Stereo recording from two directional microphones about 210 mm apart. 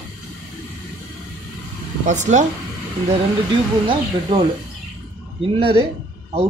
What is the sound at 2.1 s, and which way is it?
Speech, 35° right (ahead or behind).